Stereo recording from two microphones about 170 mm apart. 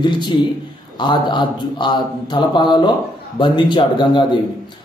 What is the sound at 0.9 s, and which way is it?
A man's voice, 25° left (ahead or behind).